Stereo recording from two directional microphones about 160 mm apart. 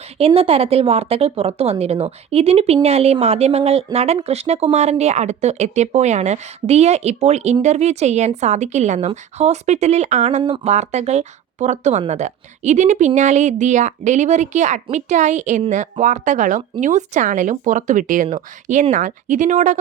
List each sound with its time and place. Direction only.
0.2 s a woman's voice: 35° right (ahead or behind)